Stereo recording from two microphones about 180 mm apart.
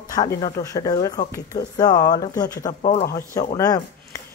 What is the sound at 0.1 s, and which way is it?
Speech, 20° left (ahead or behind).